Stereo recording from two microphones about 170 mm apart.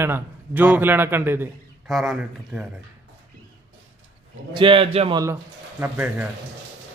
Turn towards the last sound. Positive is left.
turn(degrees=-10)  # may be behind; listen again after turning